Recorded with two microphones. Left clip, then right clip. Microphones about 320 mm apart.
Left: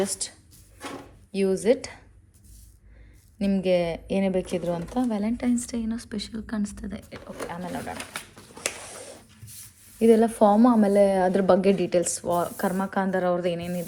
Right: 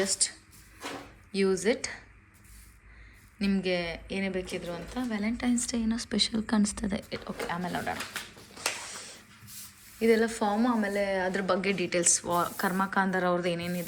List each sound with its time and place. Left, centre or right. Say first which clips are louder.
0.2 s speech: right 4 dB; centre
3.3 s speech: left 7 dB; centre
10.0 s speech: left 7 dB; centre